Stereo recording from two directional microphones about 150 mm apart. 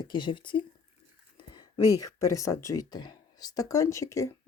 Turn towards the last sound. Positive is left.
turn(degrees=20)  # may be behind; listen again after turning